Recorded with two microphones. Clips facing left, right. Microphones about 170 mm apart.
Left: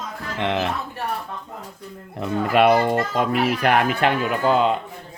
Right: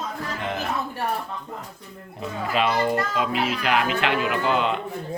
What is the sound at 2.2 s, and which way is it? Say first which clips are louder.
A child's voice: left 7 dB; 60° left (ahead or behind).